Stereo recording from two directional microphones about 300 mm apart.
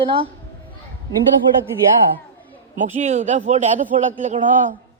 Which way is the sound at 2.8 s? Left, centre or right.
Right.